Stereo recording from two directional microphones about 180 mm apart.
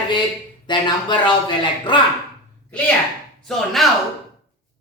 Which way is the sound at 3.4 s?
Centre (ahead or behind).